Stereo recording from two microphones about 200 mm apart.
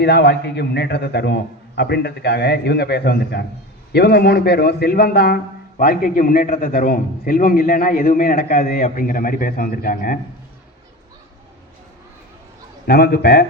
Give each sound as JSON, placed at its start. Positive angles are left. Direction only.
{"t": 0.0, "sound": "a man's voice", "side_deg": 55}
{"t": 12.9, "sound": "a man's voice", "side_deg": 50}